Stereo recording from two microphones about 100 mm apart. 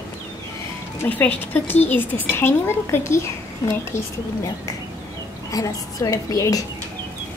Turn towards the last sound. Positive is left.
turn(degrees=35)  # may be behind; listen again after turning